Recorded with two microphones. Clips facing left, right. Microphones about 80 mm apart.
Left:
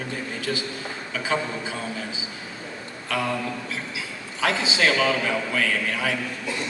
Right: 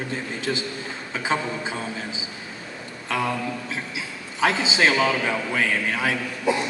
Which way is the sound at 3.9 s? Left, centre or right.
Right.